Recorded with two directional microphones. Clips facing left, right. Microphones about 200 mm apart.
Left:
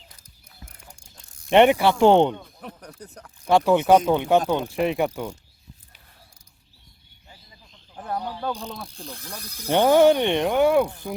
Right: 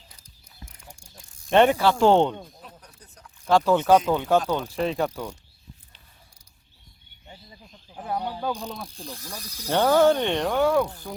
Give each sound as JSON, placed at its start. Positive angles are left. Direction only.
{"t": 1.5, "sound": "speech", "side_deg": 15}
{"t": 2.6, "sound": "a sound", "side_deg": 65}
{"t": 3.4, "sound": "speech", "side_deg": 15}
{"t": 7.9, "sound": "bird", "side_deg": -10}
{"t": 8.4, "sound": "pulleys", "side_deg": -10}
{"t": 9.4, "sound": "speech", "side_deg": 55}
{"t": 9.7, "sound": "speech", "side_deg": 20}